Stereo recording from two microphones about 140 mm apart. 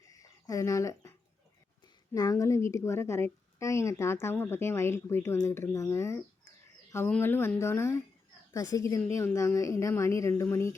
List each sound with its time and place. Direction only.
0.1 s a sound: 25° left (ahead or behind)
2.1 s a woman's voice: 25° left (ahead or behind)
7.2 s a woman's voice: 15° left (ahead or behind)